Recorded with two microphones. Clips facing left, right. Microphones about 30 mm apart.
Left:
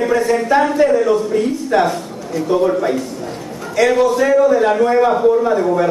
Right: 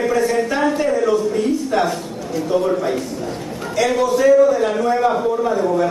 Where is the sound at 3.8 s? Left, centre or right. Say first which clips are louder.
Left 3 dB; centre.